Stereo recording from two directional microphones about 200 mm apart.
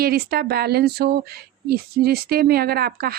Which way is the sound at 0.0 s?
50° right (ahead or behind).